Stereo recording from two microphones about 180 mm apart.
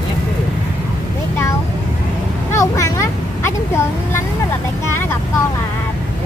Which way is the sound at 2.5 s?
15° left (ahead or behind).